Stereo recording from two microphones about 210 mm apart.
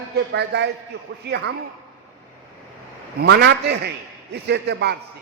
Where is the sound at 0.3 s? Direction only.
55° right (ahead or behind).